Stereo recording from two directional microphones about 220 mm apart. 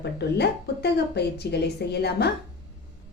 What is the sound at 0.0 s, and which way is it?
A woman's voice, 50° left (ahead or behind).